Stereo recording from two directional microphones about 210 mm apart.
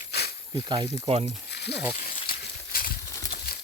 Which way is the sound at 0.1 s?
50° left (ahead or behind).